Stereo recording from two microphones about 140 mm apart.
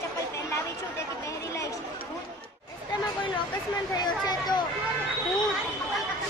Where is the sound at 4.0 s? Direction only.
30° left (ahead or behind).